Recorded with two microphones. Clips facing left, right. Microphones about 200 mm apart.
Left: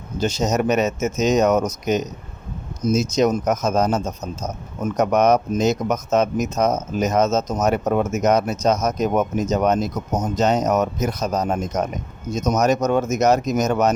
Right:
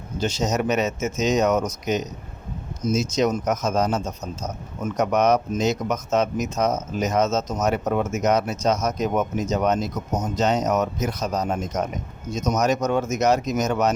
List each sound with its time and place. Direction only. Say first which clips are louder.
0.2 s speech: left 3 dB; 40° left (ahead or behind)